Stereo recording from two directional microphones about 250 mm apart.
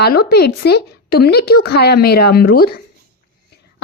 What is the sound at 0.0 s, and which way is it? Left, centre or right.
A woman's voice, left.